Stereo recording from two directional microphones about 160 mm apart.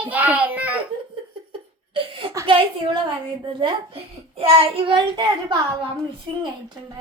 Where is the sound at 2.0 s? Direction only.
35° right (ahead or behind).